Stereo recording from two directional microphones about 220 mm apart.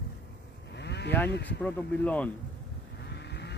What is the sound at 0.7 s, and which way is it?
Vehicle, 50° left (ahead or behind).